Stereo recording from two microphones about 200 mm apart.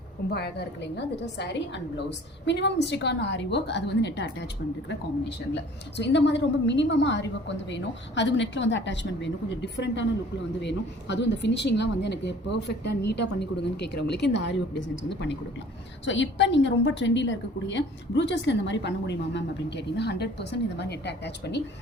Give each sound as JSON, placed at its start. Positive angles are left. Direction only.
{"t": 0.3, "sound": "a woman's voice", "side_deg": 55}
{"t": 5.5, "sound": "a woman's voice", "side_deg": 60}